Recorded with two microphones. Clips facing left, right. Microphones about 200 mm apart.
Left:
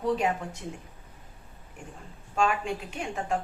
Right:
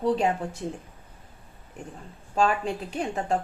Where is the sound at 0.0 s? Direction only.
30° right (ahead or behind).